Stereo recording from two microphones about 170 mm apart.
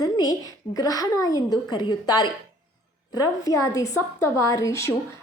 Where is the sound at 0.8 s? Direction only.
20° left (ahead or behind).